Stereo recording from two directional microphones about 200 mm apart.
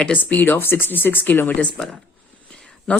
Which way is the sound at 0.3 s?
10° left (ahead or behind).